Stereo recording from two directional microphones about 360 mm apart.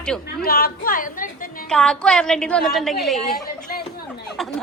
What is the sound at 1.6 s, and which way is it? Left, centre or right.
A woman's voice, centre.